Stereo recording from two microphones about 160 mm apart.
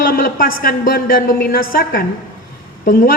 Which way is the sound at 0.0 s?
65° left (ahead or behind).